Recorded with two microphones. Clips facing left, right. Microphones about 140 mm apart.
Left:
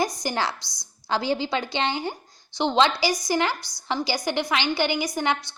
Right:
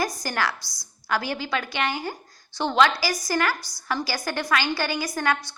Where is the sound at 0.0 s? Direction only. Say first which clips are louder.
Left 1 dB; 20° left (ahead or behind).